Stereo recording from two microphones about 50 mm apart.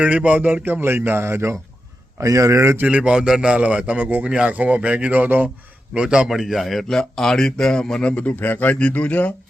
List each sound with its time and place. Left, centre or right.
0.0 s speech: right
2.1 s speech: right
2.8 s a man's voice: right
3.6 s a man's voice: right
5.9 s a man's voice: centre
6.2 s speech: centre
6.8 s speech: centre
8.1 s speech: left